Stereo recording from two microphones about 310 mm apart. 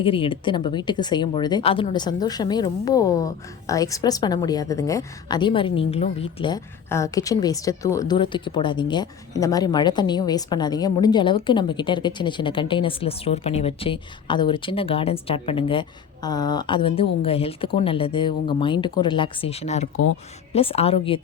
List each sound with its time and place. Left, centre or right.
0.0 s a woman's voice: centre